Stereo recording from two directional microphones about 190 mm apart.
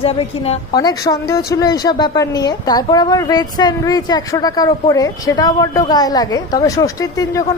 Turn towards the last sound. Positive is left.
turn(degrees=15)  # may be behind; listen again after turning